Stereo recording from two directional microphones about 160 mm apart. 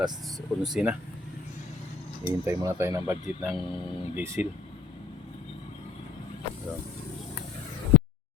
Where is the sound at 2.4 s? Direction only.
15° right (ahead or behind).